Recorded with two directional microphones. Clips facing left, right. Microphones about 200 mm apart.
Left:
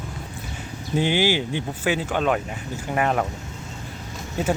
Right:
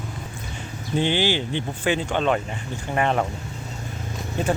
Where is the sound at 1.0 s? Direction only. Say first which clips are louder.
Left 1 dB; 10° left (ahead or behind).